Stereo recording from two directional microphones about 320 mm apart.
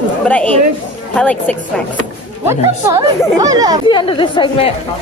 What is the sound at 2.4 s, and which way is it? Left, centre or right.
Speech, centre.